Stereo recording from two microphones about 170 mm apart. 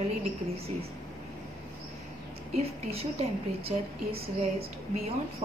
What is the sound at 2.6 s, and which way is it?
A woman's voice, 35° right (ahead or behind).